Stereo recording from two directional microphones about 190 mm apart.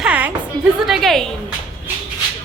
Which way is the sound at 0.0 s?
10° right (ahead or behind).